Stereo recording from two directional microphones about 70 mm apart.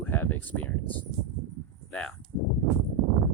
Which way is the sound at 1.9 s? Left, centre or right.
Centre.